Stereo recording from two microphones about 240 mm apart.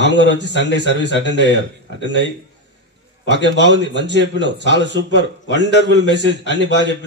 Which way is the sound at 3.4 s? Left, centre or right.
Left.